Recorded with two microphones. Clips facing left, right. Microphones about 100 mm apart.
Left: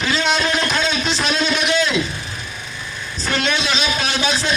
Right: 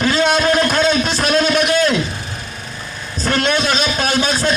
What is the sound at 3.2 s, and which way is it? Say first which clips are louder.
A man's voice: right 4 dB; 50° right (ahead or behind).